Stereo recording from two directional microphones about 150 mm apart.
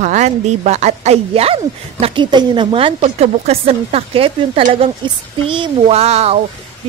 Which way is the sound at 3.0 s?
45° right (ahead or behind).